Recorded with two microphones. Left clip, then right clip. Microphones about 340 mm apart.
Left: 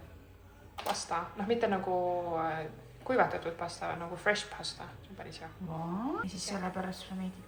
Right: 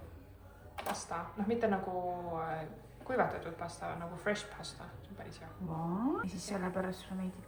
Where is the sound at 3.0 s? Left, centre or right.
Left.